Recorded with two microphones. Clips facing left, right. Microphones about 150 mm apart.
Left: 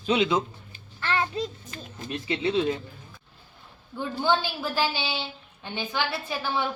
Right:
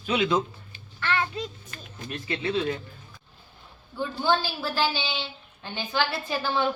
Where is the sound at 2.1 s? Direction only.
20° left (ahead or behind).